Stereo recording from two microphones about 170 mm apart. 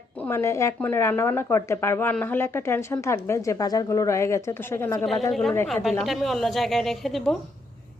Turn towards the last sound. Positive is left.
turn(degrees=0)  # may be behind; listen again after turning